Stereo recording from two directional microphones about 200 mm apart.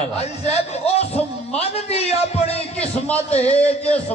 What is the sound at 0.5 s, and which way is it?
A man's voice, 30° left (ahead or behind).